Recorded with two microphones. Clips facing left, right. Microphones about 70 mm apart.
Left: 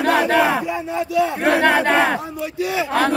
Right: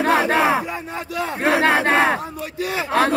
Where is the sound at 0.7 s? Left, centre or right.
Right.